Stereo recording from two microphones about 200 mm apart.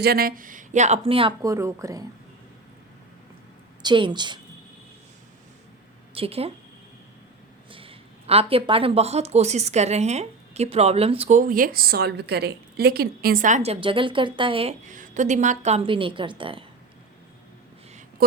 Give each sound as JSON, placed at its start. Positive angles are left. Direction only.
{"t": 0.0, "sound": "speech", "side_deg": -50}
{"t": 3.8, "sound": "a woman's voice", "side_deg": -25}
{"t": 6.1, "sound": "a woman's voice", "side_deg": -30}
{"t": 7.7, "sound": "speech", "side_deg": -25}
{"t": 18.2, "sound": "speech", "side_deg": -50}